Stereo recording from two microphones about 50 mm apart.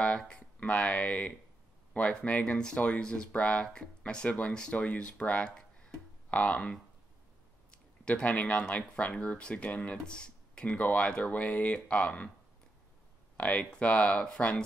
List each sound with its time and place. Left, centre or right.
0.0 s speech: left
5.5 s tick-tock: centre
6.3 s speech: left
7.7 s speech: left
9.9 s speech: centre
13.4 s speech: left